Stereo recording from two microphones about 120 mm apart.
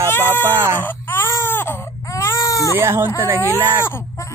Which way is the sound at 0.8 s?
20° left (ahead or behind).